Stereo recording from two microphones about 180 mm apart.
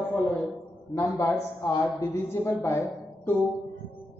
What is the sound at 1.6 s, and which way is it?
A woman's voice, 20° left (ahead or behind).